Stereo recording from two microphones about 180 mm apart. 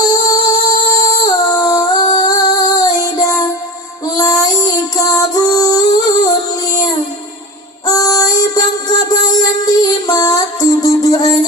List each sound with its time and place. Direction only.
0.1 s humming: 20° left (ahead or behind)
4.0 s music: 20° left (ahead or behind)
7.9 s music: 20° left (ahead or behind)